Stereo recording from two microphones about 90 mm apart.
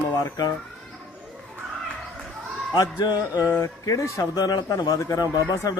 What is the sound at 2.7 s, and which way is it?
A man's voice, 50° left (ahead or behind).